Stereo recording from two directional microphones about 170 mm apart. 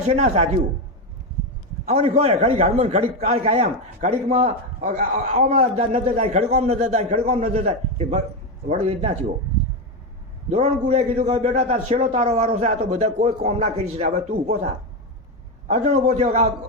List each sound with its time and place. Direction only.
0.1 s a man's voice: 45° right (ahead or behind)
1.8 s a man's voice: 40° right (ahead or behind)
10.5 s a man's voice: 45° right (ahead or behind)
15.6 s a man's voice: 45° right (ahead or behind)